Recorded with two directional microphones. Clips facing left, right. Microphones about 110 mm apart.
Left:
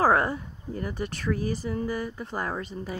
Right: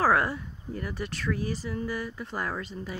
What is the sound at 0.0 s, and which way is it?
Speech, 25° left (ahead or behind).